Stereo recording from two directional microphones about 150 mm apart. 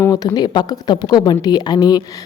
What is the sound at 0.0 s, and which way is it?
A woman's voice, 25° left (ahead or behind).